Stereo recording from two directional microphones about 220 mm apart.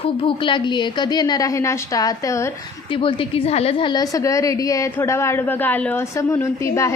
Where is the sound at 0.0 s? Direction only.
25° left (ahead or behind).